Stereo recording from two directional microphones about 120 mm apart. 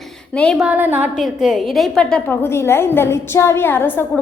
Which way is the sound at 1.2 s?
5° right (ahead or behind).